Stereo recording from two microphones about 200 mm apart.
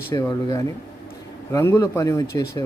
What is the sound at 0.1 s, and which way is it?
Speech, 20° left (ahead or behind).